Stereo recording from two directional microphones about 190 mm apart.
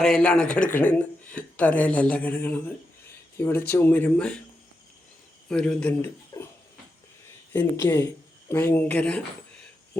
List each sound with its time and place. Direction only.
0.0 s speech: 5° left (ahead or behind)
5.5 s speech: 5° left (ahead or behind)
6.3 s a sound: 15° left (ahead or behind)
7.5 s speech: 10° left (ahead or behind)